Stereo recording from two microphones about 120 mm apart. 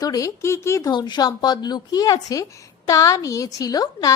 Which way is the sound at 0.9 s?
35° left (ahead or behind).